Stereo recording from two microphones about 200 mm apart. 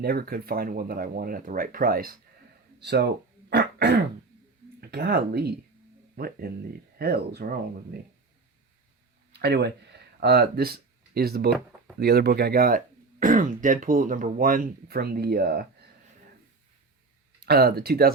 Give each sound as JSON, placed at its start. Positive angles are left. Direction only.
{"t": 0.0, "sound": "speech", "side_deg": -50}
{"t": 3.5, "sound": "throat clearing", "side_deg": -55}
{"t": 4.8, "sound": "speech", "side_deg": -50}
{"t": 9.3, "sound": "speech", "side_deg": -55}
{"t": 17.4, "sound": "speech", "side_deg": -50}